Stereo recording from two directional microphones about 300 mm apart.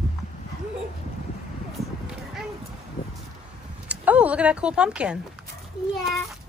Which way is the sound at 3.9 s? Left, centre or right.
Centre.